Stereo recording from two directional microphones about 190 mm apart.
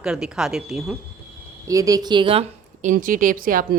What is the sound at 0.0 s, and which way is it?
Speech, 5° right (ahead or behind).